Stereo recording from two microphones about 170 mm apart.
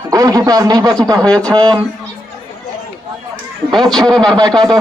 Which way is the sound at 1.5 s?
20° right (ahead or behind).